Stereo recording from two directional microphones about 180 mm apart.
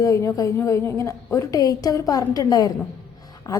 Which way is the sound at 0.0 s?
15° left (ahead or behind).